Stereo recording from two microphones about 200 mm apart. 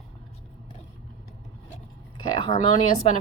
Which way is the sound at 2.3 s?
25° left (ahead or behind).